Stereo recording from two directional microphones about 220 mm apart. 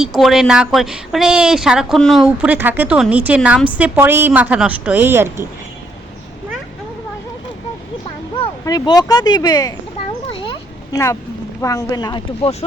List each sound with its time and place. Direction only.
0.0 s a woman's voice: centre (ahead or behind)
8.4 s speech: 20° left (ahead or behind)
10.4 s a sound: 20° left (ahead or behind)
11.6 s speech: 15° left (ahead or behind)